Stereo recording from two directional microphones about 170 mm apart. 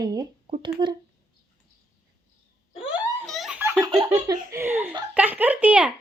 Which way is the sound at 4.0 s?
20° right (ahead or behind).